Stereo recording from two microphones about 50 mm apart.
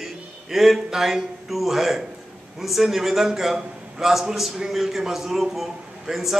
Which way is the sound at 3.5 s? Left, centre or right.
Centre.